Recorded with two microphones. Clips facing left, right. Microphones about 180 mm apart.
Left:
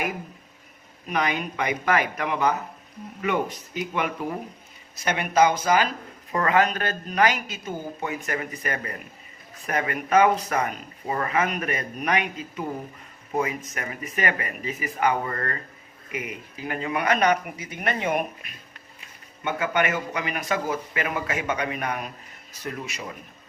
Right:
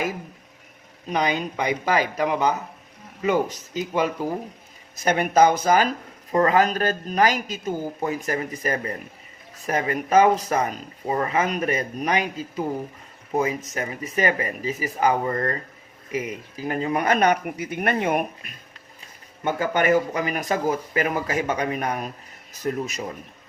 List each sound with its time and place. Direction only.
1.0 s speech: 30° right (ahead or behind)
5.0 s speech: 45° right (ahead or behind)
6.3 s speech: 30° right (ahead or behind); by 18.5 s 50° right (ahead or behind)
19.5 s speech: 35° right (ahead or behind)